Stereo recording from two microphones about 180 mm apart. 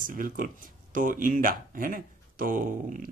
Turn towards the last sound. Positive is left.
turn(degrees=-50)  # may be behind; listen again after turning